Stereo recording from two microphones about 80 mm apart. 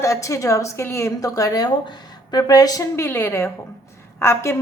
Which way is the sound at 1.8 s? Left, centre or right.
Left.